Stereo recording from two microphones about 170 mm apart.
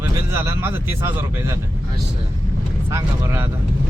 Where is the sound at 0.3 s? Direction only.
15° right (ahead or behind).